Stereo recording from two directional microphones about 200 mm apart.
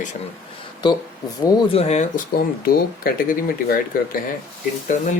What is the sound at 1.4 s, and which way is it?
Speech, 30° left (ahead or behind).